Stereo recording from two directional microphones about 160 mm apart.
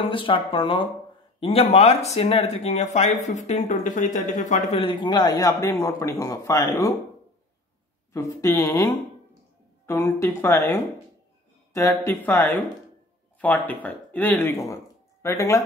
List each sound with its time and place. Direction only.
0.0 s speech: 35° left (ahead or behind)
8.1 s speech: 20° left (ahead or behind)